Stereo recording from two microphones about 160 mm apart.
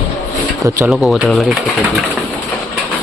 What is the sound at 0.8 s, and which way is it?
Speech, 5° right (ahead or behind).